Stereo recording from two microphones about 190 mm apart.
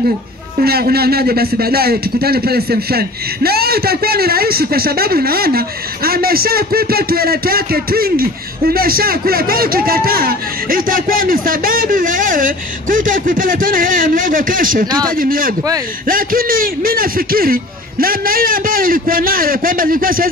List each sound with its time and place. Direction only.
0.6 s a man's voice: 55° right (ahead or behind)